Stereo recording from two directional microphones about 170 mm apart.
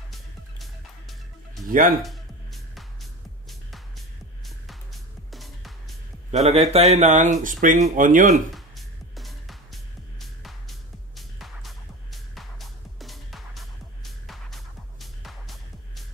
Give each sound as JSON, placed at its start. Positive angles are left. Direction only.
{"t": 0.1, "sound": "music", "side_deg": 0}
{"t": 1.7, "sound": "speech", "side_deg": -55}
{"t": 2.0, "sound": "music", "side_deg": 0}
{"t": 6.3, "sound": "a man's voice", "side_deg": -40}
{"t": 8.5, "sound": "music", "side_deg": 0}